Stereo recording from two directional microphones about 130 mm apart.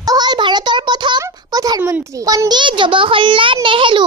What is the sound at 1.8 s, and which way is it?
A child's voice, 20° right (ahead or behind).